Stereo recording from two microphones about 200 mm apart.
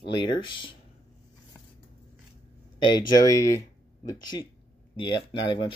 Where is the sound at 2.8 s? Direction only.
20° left (ahead or behind).